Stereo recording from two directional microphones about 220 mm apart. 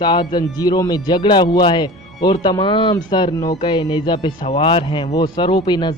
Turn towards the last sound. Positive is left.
turn(degrees=20)  # may be behind; listen again after turning